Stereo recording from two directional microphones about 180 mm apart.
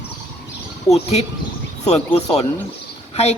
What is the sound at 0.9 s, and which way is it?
Speech, 35° left (ahead or behind).